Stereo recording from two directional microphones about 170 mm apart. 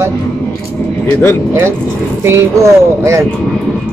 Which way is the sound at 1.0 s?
10° left (ahead or behind).